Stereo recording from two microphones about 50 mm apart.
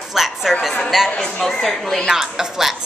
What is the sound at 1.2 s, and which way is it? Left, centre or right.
Speech, centre.